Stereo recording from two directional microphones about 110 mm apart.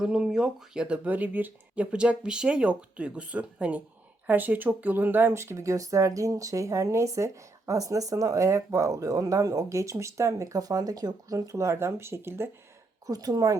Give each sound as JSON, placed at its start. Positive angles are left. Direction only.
{"t": 0.0, "sound": "speech", "side_deg": -5}
{"t": 13.1, "sound": "a woman's voice", "side_deg": -35}